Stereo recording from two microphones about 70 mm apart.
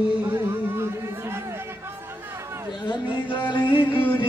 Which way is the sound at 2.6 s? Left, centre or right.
Left.